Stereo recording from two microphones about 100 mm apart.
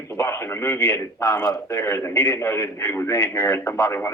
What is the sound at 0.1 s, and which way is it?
A man's voice, 25° left (ahead or behind).